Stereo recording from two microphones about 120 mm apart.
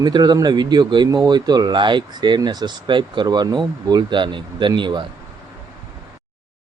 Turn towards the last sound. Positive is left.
turn(degrees=-40)  # may be behind; listen again after turning